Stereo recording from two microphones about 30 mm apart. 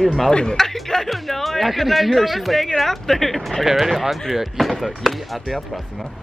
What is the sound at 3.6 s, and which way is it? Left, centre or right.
Speech, centre.